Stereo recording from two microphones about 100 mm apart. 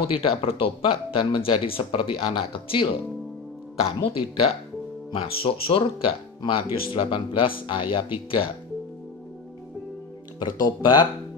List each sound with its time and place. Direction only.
0.1 s speech: 70° left (ahead or behind)
4.0 s speech: 75° left (ahead or behind)
10.4 s speech: 50° left (ahead or behind)